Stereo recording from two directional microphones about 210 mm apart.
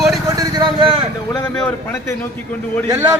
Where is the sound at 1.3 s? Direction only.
15° left (ahead or behind).